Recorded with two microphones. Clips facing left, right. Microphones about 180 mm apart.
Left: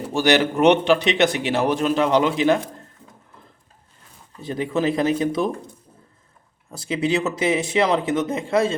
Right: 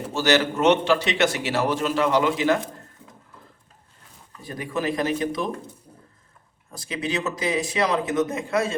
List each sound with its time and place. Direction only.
0.1 s a man's voice: 15° left (ahead or behind)
4.4 s speech: 25° left (ahead or behind)
6.7 s speech: 25° left (ahead or behind)